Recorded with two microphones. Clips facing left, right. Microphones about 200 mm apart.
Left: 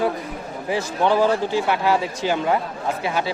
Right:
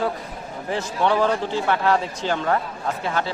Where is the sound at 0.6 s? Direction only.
10° left (ahead or behind).